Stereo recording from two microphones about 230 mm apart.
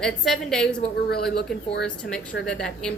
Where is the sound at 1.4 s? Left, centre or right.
Left.